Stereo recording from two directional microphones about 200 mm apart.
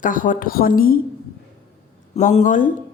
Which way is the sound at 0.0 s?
40° left (ahead or behind).